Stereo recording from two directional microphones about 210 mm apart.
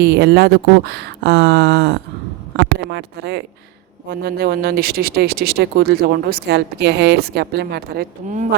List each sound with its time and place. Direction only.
0.0 s speech: 50° right (ahead or behind)